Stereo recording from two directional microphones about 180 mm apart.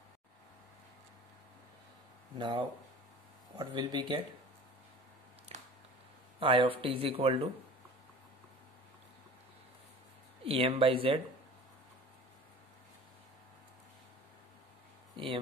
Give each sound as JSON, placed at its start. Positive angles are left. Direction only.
{"t": 2.3, "sound": "speech", "side_deg": -25}
{"t": 5.5, "sound": "a sound", "side_deg": -35}
{"t": 6.4, "sound": "speech", "side_deg": -30}
{"t": 10.4, "sound": "speech", "side_deg": -30}